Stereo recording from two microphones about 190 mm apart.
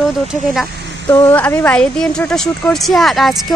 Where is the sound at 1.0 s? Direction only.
10° left (ahead or behind).